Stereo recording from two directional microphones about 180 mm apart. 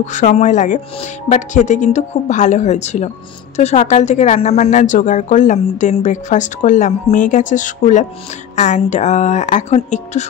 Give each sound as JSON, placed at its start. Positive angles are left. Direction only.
{"t": 0.0, "sound": "a woman's voice", "side_deg": 40}